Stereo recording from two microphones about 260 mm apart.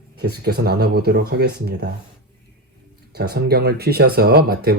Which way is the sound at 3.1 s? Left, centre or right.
Right.